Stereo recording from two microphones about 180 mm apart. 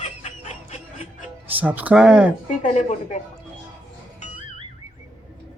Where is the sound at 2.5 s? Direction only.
40° left (ahead or behind).